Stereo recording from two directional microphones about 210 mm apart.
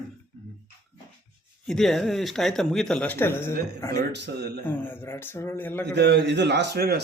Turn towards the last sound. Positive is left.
turn(degrees=-50)  # may be behind; listen again after turning